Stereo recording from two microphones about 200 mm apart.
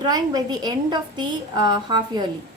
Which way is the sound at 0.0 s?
20° right (ahead or behind).